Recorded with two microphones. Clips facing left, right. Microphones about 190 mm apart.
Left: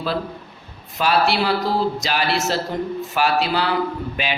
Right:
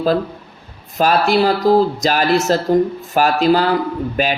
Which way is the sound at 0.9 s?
45° right (ahead or behind).